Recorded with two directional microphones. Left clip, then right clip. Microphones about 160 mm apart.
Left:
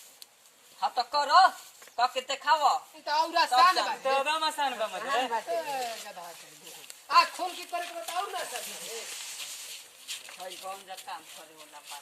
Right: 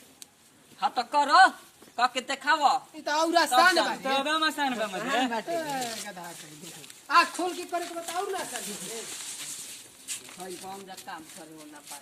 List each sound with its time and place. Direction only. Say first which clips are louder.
0.8 s speech: right 3 dB; 10° left (ahead or behind)
3.0 s speech: right 2 dB; 5° right (ahead or behind)
7.1 s speech: right 1 dB; 10° left (ahead or behind)